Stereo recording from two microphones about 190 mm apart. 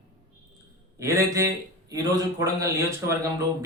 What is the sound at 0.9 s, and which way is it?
A man's voice, 15° right (ahead or behind).